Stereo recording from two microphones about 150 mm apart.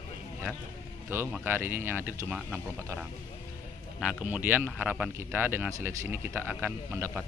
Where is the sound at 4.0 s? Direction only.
10° right (ahead or behind).